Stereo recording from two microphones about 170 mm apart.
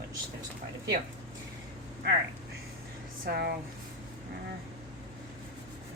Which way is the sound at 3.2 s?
70° right (ahead or behind).